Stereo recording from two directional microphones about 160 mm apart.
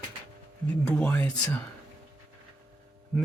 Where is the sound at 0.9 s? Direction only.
10° left (ahead or behind).